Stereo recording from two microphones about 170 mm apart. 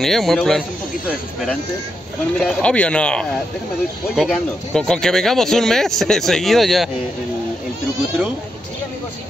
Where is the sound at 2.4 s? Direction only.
5° left (ahead or behind).